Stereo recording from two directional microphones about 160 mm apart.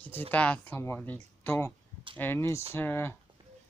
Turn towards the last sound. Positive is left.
turn(degrees=15)  # may be behind; listen again after turning